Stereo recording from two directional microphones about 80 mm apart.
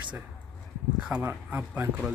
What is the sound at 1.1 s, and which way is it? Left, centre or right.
Speech, right.